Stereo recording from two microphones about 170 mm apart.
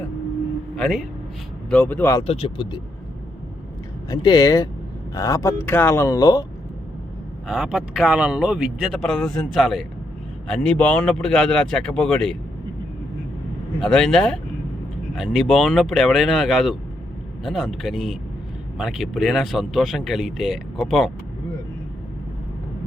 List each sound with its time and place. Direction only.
0.8 s speech: centre (ahead or behind)
1.7 s speech: 10° left (ahead or behind)
2.2 s speech: 35° left (ahead or behind)
4.1 s speech: 20° left (ahead or behind)
7.4 s speech: centre (ahead or behind)
13.8 s speech: 5° left (ahead or behind)